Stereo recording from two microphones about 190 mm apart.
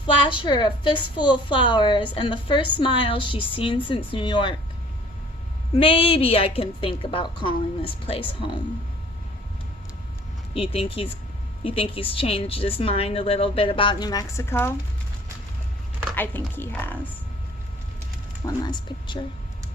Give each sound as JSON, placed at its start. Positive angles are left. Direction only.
{"t": 0.3, "sound": "a woman's voice", "side_deg": 25}
{"t": 5.7, "sound": "a woman's voice", "side_deg": 30}
{"t": 10.5, "sound": "a woman's voice", "side_deg": 30}
{"t": 16.1, "sound": "a woman's voice", "side_deg": 10}
{"t": 18.4, "sound": "a woman's voice", "side_deg": 20}